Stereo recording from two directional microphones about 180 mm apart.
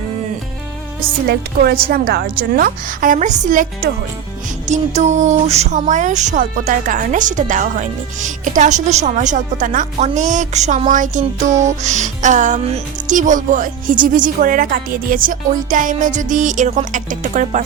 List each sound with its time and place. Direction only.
1.3 s a woman's voice: 60° right (ahead or behind)
4.6 s speech: 40° right (ahead or behind)